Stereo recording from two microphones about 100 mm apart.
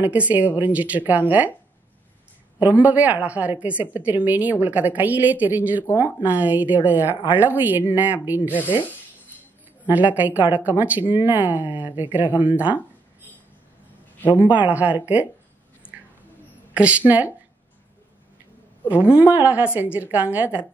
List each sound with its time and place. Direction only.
0.0 s a woman's voice: 15° right (ahead or behind)
2.6 s a woman's voice: 15° right (ahead or behind)
9.8 s a woman's voice: 15° right (ahead or behind)
14.2 s a man's voice: 20° left (ahead or behind)
14.7 s a woman's voice: 15° right (ahead or behind)
16.7 s a woman's voice: 15° right (ahead or behind)
19.1 s a woman's voice: 15° right (ahead or behind)